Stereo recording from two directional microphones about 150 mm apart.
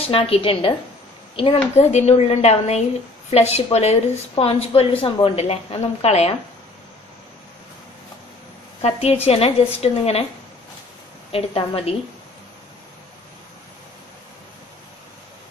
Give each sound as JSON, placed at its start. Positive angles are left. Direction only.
{"t": 0.0, "sound": "a woman's voice", "side_deg": 40}
{"t": 8.8, "sound": "a woman's voice", "side_deg": 45}
{"t": 11.3, "sound": "a woman's voice", "side_deg": 40}